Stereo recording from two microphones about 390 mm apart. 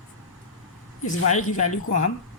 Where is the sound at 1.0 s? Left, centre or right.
Centre.